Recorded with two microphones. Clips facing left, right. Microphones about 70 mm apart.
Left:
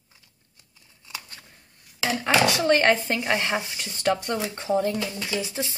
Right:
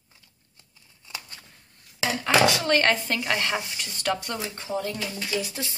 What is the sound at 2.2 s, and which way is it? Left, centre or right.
Speech, centre.